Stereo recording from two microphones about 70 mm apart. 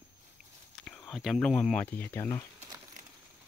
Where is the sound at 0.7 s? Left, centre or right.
Centre.